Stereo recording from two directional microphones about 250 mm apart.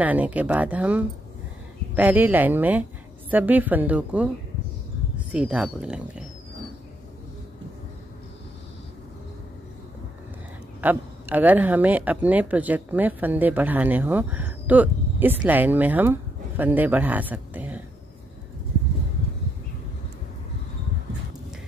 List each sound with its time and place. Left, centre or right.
0.0 s a woman's voice: centre
10.8 s speech: centre